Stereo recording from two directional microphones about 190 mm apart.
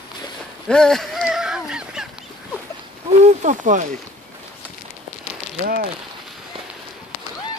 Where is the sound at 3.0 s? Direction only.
40° right (ahead or behind).